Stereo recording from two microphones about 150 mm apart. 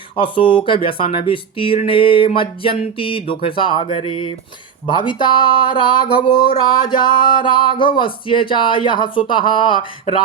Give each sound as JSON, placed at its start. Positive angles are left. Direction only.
{"t": 0.2, "sound": "speech", "side_deg": 35}